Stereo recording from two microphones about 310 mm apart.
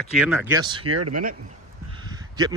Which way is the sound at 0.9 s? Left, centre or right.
Right.